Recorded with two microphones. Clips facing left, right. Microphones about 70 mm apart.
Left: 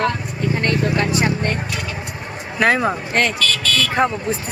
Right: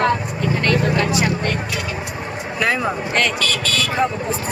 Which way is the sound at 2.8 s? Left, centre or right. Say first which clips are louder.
Left 1 dB; left.